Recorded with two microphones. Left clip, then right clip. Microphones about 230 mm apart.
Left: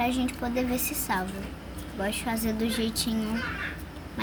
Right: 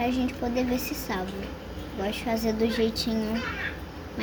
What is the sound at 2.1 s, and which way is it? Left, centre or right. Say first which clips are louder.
A woman's voice: right 3 dB; left.